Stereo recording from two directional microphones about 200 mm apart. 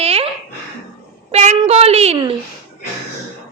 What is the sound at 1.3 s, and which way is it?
A woman's voice, 35° right (ahead or behind).